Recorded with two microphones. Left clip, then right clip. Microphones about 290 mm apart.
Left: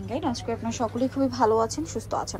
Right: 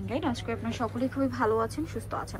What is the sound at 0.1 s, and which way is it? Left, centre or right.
A woman's voice, centre.